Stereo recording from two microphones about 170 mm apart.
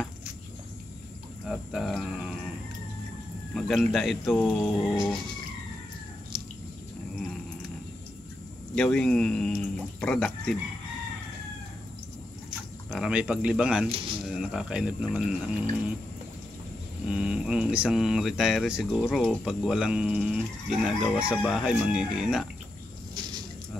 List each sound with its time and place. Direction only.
1.5 s speech: centre (ahead or behind)
3.5 s speech: centre (ahead or behind)
6.3 s a sound: 25° right (ahead or behind)
8.7 s speech: 5° left (ahead or behind)
12.9 s speech: 5° right (ahead or behind)
17.1 s speech: 5° right (ahead or behind)